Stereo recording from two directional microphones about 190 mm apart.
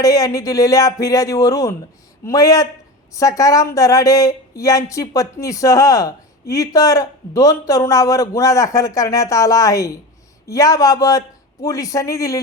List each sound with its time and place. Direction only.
0.0 s speech: 20° left (ahead or behind)